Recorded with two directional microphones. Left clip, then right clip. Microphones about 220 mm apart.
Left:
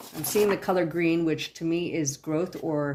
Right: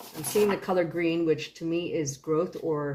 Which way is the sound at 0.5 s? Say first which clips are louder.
Left 1 dB; 55° left (ahead or behind).